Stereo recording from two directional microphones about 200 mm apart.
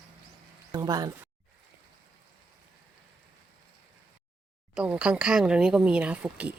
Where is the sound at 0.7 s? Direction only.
20° right (ahead or behind).